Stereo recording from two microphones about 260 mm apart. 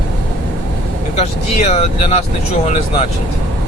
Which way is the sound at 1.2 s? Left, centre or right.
Left.